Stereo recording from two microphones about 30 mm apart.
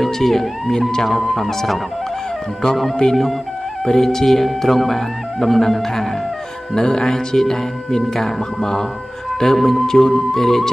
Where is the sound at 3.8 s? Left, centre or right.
Centre.